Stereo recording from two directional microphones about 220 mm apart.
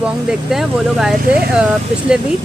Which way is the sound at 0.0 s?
Centre (ahead or behind).